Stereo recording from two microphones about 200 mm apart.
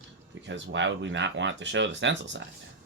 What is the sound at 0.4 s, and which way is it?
Speech, 65° right (ahead or behind).